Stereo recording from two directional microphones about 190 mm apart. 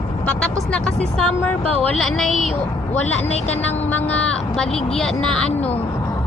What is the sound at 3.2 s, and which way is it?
Speech, 35° left (ahead or behind).